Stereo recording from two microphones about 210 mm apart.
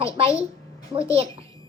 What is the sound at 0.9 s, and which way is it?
Speech, 30° right (ahead or behind).